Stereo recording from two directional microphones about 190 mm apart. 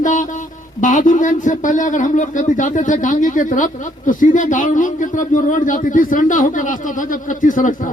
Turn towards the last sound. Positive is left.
turn(degrees=45)  # may be behind; listen again after turning